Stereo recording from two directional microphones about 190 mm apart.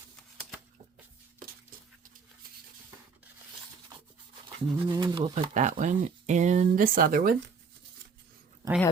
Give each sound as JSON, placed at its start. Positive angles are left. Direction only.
{"t": 4.4, "sound": "speech", "side_deg": -20}